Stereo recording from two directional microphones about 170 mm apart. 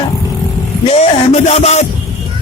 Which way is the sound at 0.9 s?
35° left (ahead or behind).